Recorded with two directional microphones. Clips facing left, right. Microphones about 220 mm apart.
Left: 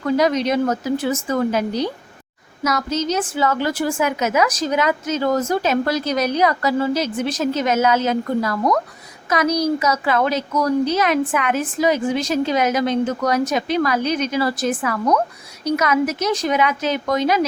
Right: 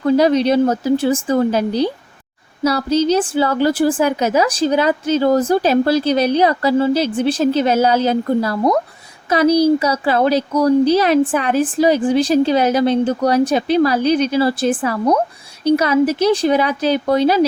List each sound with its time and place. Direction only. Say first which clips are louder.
0.0 s a woman's voice: right 5 dB; 30° right (ahead or behind)